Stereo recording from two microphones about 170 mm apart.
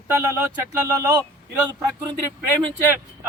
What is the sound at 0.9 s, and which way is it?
Speech, 20° right (ahead or behind).